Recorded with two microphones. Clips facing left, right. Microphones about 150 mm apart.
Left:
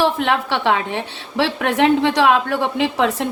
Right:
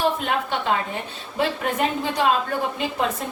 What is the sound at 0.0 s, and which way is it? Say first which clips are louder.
A woman's voice: left 5 dB; 85° left.